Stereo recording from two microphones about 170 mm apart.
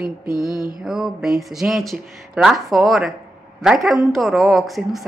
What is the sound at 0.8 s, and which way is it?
Speech, 5° right (ahead or behind).